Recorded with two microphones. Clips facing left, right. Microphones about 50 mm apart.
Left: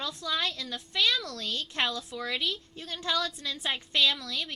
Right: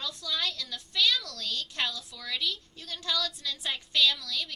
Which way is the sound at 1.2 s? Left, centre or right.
Left.